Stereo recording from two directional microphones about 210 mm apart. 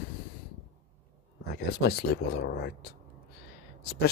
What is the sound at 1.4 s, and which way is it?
Speech, 50° left (ahead or behind).